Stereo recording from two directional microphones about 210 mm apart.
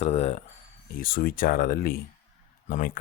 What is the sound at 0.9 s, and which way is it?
Speech, 45° left (ahead or behind).